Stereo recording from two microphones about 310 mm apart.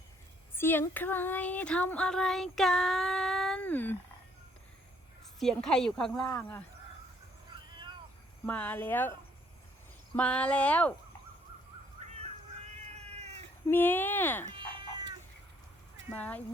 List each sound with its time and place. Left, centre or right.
0.5 s child singing: centre
5.4 s a woman's voice: centre
7.5 s cat: centre
8.4 s a woman's voice: centre
10.2 s a woman's voice: centre
13.0 s cat: centre
13.7 s speech: centre
14.4 s dog: centre
16.1 s a woman's voice: centre